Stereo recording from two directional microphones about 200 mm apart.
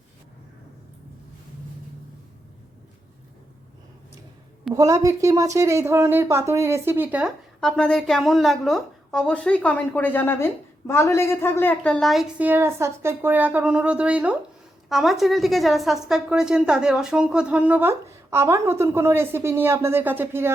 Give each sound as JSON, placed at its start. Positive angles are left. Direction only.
{"t": 4.7, "sound": "a woman's voice", "side_deg": -15}